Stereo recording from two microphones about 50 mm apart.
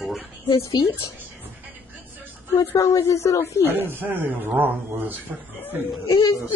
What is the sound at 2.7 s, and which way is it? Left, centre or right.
Speech, left.